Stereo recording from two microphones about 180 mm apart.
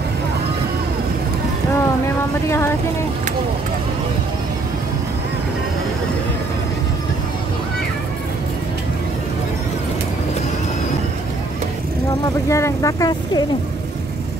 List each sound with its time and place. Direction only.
12.4 s speech: 15° left (ahead or behind)